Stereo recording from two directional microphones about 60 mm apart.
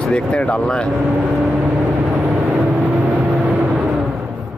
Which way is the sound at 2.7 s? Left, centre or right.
Right.